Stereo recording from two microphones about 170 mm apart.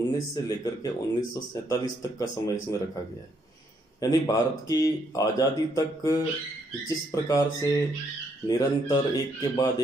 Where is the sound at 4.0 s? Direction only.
20° left (ahead or behind).